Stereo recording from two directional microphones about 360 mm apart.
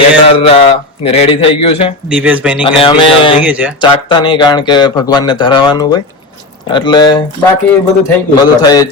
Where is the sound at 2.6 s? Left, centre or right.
Centre.